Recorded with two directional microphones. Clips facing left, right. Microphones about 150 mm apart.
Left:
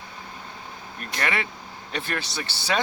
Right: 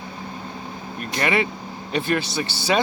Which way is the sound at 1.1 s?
15° right (ahead or behind).